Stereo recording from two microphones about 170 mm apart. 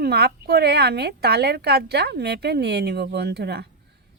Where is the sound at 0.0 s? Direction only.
70° right (ahead or behind).